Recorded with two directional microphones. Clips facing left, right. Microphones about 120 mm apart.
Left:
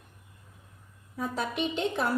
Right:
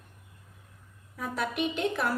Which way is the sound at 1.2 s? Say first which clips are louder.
Even; 25° left (ahead or behind).